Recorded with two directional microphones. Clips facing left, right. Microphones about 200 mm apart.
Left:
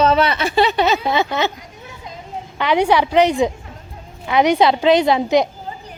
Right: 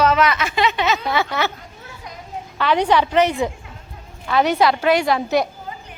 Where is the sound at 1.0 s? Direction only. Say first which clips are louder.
Left 3 dB; 20° left (ahead or behind).